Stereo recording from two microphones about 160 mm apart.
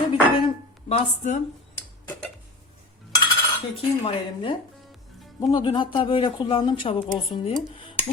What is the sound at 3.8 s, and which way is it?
Speech, 35° left (ahead or behind).